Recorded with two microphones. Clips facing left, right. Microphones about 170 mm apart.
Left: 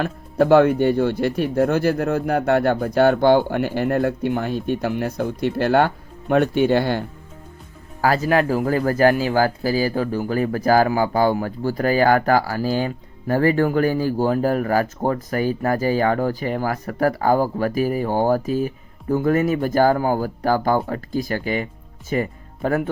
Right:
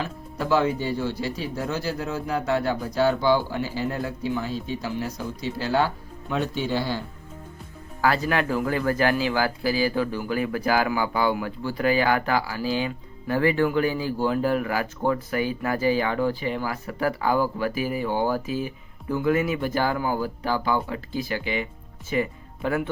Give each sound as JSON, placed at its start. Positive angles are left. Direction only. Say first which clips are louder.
{"t": 0.0, "sound": "speech", "louder": "left 10 dB", "side_deg": 60}
{"t": 8.0, "sound": "speech", "louder": "left 5 dB", "side_deg": 40}